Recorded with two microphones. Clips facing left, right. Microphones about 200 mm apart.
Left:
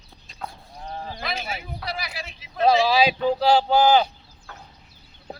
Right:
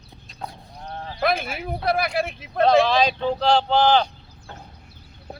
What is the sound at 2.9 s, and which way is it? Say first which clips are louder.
Speech: left 1 dB; 5° left (ahead or behind).